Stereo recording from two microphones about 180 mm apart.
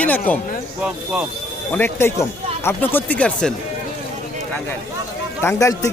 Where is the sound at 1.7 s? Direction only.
15° left (ahead or behind).